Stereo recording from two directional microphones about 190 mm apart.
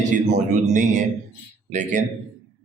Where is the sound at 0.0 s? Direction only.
40° right (ahead or behind).